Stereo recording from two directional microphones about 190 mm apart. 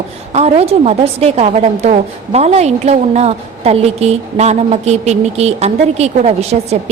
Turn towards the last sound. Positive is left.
turn(degrees=-35)  # may be behind; listen again after turning